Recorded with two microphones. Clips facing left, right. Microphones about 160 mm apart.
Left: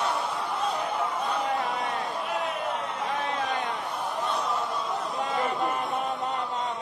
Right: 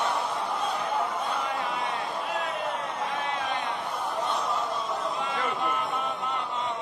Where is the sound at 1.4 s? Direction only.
40° left (ahead or behind).